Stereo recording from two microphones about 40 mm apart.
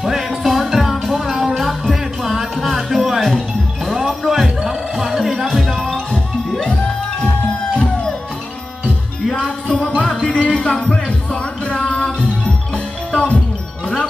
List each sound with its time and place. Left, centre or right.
0.0 s music: centre
3.2 s music: centre
4.6 s music: centre
6.6 s music: centre
9.3 s music: centre
10.4 s music: left